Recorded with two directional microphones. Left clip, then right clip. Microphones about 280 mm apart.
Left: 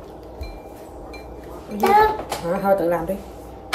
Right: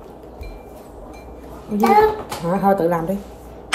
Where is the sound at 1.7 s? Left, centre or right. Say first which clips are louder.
Right 2 dB; centre.